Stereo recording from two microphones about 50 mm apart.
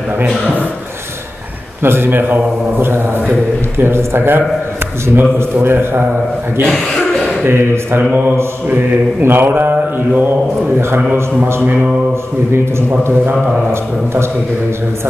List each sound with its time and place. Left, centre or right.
1.8 s a man's voice: right
6.6 s a man's voice: centre
7.4 s speech: right
9.2 s a man's voice: right
11.6 s a sound: right